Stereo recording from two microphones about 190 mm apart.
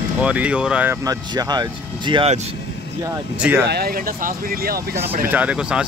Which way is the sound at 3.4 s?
10° right (ahead or behind).